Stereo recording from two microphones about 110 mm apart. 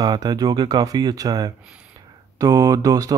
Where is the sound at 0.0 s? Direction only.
40° right (ahead or behind).